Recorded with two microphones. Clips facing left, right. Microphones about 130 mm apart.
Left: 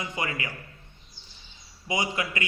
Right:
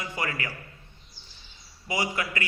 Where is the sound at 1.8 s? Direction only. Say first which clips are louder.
Left 1 dB; 20° left (ahead or behind).